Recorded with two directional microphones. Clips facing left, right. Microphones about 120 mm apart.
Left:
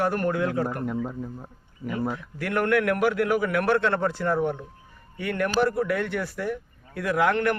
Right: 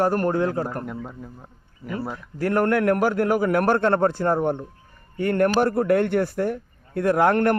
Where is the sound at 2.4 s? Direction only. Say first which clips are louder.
Right 3 dB; 35° right (ahead or behind).